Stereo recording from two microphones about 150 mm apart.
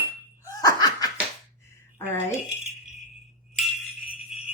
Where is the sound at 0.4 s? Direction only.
25° left (ahead or behind).